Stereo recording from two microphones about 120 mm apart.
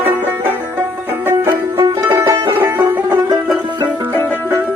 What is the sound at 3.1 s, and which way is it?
Music, 35° right (ahead or behind).